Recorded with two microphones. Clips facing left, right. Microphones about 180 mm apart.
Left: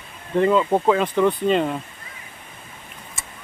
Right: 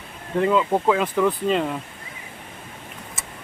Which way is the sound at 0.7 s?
10° left (ahead or behind).